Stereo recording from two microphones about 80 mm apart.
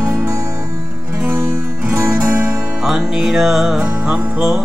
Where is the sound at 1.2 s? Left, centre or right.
Right.